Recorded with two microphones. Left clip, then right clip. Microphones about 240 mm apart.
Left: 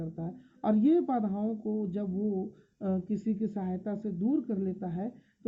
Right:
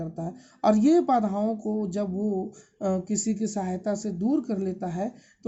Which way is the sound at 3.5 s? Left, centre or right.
Right.